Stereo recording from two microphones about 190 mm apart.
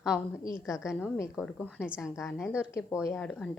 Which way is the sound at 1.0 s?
10° left (ahead or behind).